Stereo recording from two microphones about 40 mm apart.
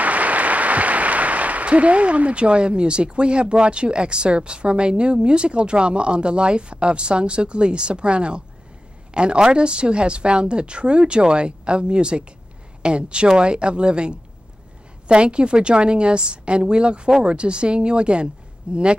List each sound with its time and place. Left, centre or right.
0.0 s a woman's voice: right